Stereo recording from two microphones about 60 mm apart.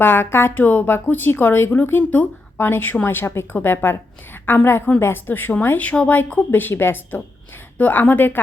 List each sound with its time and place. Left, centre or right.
0.0 s speech: left